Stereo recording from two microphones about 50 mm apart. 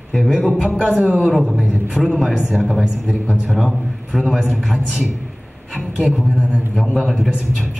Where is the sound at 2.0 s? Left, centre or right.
Centre.